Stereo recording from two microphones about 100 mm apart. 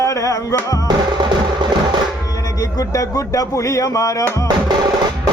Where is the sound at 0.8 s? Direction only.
50° right (ahead or behind).